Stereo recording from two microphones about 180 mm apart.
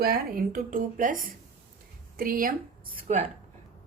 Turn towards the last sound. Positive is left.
turn(degrees=-35)  # may be behind; listen again after turning